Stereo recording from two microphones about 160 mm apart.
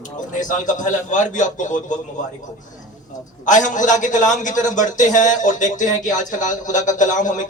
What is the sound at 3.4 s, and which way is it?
Speech, 50° left (ahead or behind).